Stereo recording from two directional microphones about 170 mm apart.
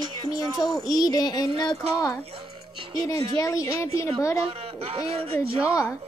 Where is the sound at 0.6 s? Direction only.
Centre (ahead or behind).